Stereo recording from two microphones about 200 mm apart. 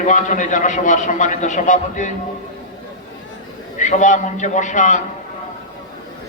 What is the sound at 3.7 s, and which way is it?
A man's voice, 40° left (ahead or behind).